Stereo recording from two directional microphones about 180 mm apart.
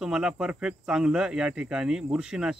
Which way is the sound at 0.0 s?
5° right (ahead or behind).